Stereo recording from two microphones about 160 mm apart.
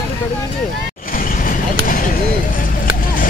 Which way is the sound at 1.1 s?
60° left (ahead or behind).